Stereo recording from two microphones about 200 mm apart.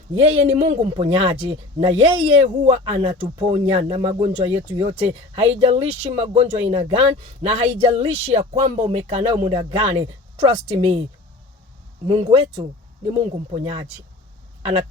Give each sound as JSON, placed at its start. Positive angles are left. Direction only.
{"t": 0.1, "sound": "speech", "side_deg": -25}
{"t": 12.0, "sound": "speech", "side_deg": -25}